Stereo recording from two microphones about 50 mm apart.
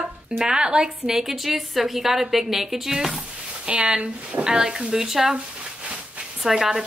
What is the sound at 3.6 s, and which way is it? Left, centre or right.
A woman's voice, right.